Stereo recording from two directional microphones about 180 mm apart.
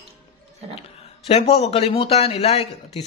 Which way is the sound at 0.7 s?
35° left (ahead or behind).